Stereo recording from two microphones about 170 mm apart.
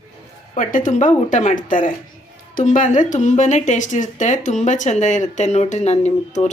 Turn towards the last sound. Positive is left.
turn(degrees=40)  # may be behind; listen again after turning